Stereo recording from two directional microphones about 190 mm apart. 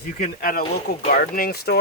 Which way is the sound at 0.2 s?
50° left (ahead or behind).